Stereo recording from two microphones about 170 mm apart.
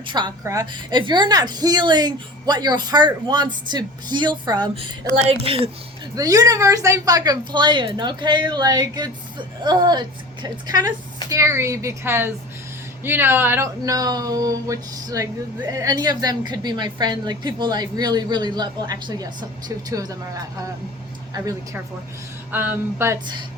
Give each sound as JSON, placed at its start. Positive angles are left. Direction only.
{"t": 0.0, "sound": "a woman's voice", "side_deg": -25}
{"t": 6.1, "sound": "a woman's voice", "side_deg": -20}
{"t": 21.3, "sound": "a woman's voice", "side_deg": -20}